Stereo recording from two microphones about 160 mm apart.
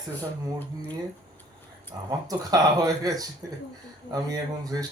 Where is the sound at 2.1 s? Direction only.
25° right (ahead or behind).